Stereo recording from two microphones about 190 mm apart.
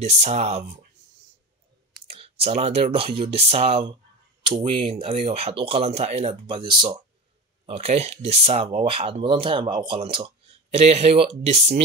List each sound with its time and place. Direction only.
0.0 s speech: 35° right (ahead or behind)
2.0 s clicking: 30° right (ahead or behind)
3.2 s speech: 30° right (ahead or behind)